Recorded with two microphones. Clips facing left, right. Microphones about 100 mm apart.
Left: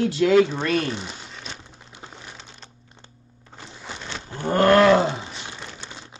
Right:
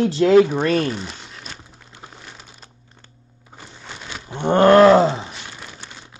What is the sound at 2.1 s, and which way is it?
Crumpling, 5° right (ahead or behind).